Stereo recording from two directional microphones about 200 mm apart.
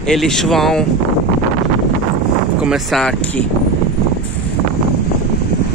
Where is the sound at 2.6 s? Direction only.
Centre (ahead or behind).